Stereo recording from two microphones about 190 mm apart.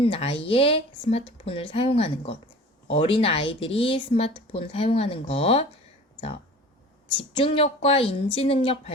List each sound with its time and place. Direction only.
0.0 s speech: 30° left (ahead or behind)
7.2 s a woman's voice: 30° left (ahead or behind)